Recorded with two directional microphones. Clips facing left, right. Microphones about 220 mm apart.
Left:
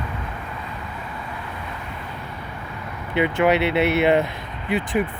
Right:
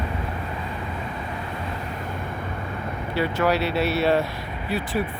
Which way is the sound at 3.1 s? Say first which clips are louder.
Left 4 dB; 20° left (ahead or behind).